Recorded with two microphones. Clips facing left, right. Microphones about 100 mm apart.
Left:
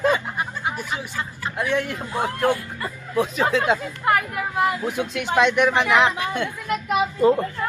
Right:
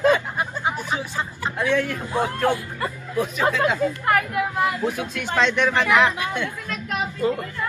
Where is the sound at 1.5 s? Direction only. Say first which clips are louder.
Right 1 dB; 20° left (ahead or behind).